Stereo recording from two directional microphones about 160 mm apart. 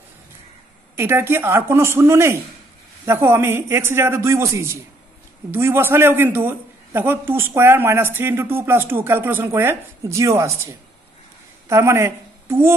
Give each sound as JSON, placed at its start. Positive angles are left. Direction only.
{"t": 0.9, "sound": "a man's voice", "side_deg": -15}
{"t": 11.7, "sound": "speech", "side_deg": -15}